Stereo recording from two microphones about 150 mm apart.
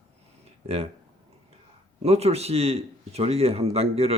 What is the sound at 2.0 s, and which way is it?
Speech, 45° right (ahead or behind).